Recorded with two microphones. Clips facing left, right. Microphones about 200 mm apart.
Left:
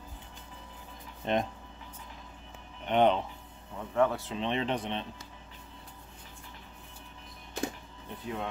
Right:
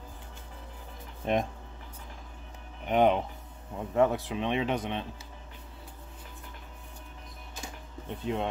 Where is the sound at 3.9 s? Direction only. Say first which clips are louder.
Right 2 dB; 20° right (ahead or behind).